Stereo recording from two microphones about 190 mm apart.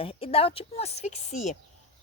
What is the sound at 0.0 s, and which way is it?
A woman's voice, 30° left (ahead or behind).